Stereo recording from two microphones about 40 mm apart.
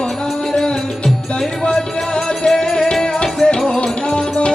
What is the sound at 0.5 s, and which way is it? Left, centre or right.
Music, centre.